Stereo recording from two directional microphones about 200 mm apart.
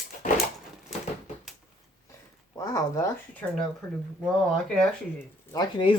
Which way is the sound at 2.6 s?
15° left (ahead or behind).